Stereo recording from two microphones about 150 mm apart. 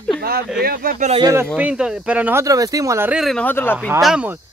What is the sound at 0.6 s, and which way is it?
Speech, 75° right (ahead or behind).